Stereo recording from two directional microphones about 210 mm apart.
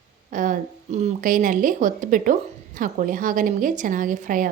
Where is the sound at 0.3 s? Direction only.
40° right (ahead or behind).